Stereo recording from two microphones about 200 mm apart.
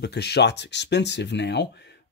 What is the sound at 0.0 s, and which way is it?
Speech, 55° left (ahead or behind).